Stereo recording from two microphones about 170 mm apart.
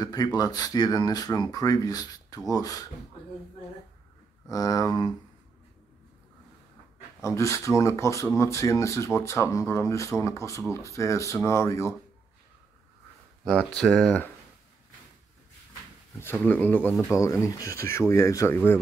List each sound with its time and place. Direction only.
0.0 s speech: 20° left (ahead or behind)
4.5 s speech: 20° left (ahead or behind)
7.2 s speech: 15° left (ahead or behind)
13.7 s speech: 5° left (ahead or behind)
16.2 s speech: 10° left (ahead or behind)